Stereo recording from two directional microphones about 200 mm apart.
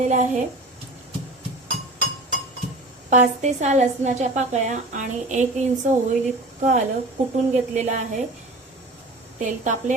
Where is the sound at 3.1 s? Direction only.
35° right (ahead or behind).